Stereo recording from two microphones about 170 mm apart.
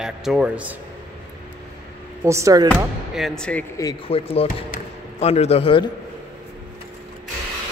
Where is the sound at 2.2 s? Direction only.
15° right (ahead or behind).